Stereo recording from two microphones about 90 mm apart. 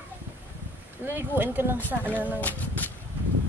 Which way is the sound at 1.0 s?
25° right (ahead or behind).